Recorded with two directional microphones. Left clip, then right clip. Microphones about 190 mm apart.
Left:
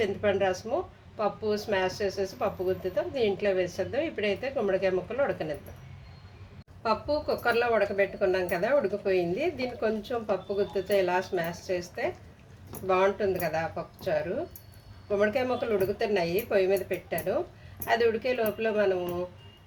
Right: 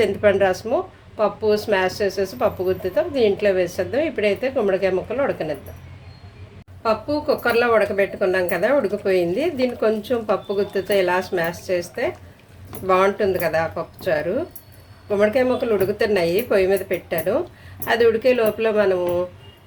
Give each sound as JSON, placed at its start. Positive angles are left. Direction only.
{"t": 0.0, "sound": "speech", "side_deg": -20}
{"t": 6.8, "sound": "speech", "side_deg": -5}